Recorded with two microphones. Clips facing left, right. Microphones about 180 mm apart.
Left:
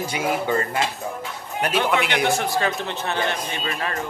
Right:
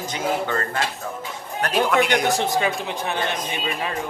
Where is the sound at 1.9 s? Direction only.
45° right (ahead or behind).